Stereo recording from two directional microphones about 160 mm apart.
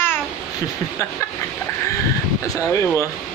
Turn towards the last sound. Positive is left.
turn(degrees=15)  # may be behind; listen again after turning